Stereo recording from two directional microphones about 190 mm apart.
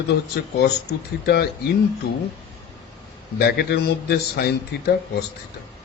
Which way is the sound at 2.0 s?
55° left (ahead or behind).